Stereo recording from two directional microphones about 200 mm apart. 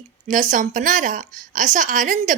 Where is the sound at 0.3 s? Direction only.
40° right (ahead or behind).